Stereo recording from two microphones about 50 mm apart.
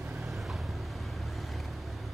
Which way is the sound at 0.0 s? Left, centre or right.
Centre.